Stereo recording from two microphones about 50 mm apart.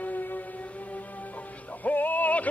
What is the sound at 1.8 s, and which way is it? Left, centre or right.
Music, left.